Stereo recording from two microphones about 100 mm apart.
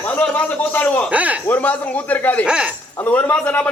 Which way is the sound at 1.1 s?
15° right (ahead or behind).